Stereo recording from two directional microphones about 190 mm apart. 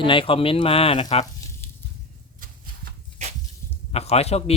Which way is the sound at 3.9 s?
35° left (ahead or behind).